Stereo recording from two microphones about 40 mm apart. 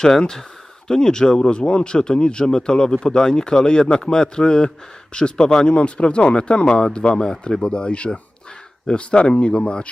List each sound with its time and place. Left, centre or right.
0.0 s speech: centre